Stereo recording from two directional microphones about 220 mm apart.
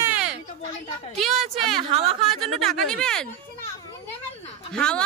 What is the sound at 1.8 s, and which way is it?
Speech, 25° right (ahead or behind).